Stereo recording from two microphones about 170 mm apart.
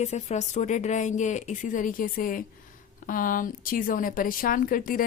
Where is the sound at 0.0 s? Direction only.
40° left (ahead or behind).